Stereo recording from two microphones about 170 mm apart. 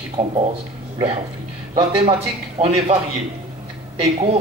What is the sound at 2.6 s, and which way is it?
Speech, 35° right (ahead or behind).